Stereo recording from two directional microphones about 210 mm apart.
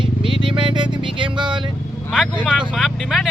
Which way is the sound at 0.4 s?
25° right (ahead or behind).